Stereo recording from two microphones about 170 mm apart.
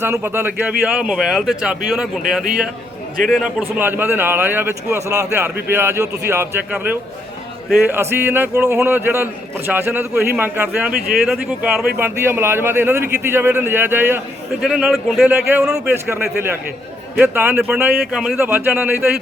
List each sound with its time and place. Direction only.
0.0 s speech: 15° right (ahead or behind)
3.2 s speech: centre (ahead or behind)
3.6 s a man's voice: 10° right (ahead or behind)
10.9 s speech: 60° right (ahead or behind)
11.3 s a man's voice: 5° right (ahead or behind)